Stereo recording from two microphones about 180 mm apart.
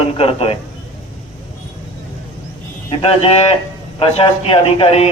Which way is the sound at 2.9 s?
35° left (ahead or behind).